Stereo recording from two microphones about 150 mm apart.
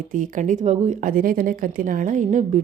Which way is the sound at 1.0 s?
70° right (ahead or behind).